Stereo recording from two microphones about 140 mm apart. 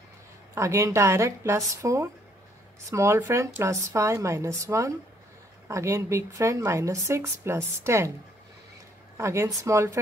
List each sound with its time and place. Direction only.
0.6 s speech: 20° right (ahead or behind)
9.1 s speech: 20° right (ahead or behind)